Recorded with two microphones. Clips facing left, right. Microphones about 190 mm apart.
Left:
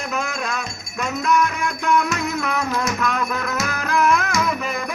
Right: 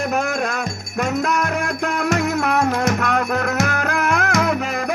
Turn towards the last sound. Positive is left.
turn(degrees=-70)  # may be behind; listen again after turning